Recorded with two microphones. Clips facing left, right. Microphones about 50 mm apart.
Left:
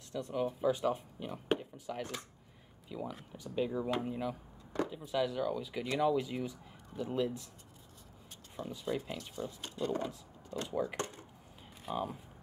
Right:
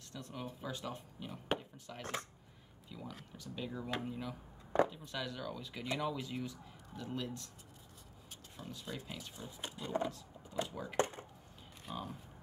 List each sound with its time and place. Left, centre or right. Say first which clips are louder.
0.1 s speech: left 11 dB; centre
8.5 s speech: left 9 dB; centre
9.3 s speech: left 5 dB; centre
10.5 s speech: right 1 dB; centre
11.0 s a sound: right 5 dB; right
11.9 s speech: left 7 dB; centre